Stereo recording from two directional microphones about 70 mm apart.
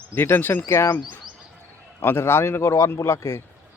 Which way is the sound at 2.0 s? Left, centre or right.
Left.